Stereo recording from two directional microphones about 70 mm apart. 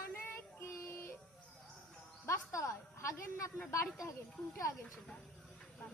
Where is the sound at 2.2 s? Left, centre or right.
Left.